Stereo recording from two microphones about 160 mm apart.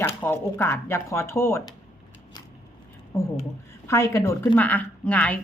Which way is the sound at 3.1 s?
15° left (ahead or behind).